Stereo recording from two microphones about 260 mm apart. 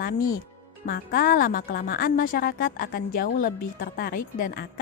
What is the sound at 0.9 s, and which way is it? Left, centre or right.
Speech, left.